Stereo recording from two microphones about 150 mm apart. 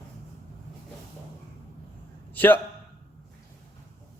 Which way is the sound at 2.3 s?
10° left (ahead or behind).